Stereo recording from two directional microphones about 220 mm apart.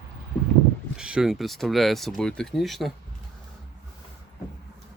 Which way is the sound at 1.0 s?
5° right (ahead or behind).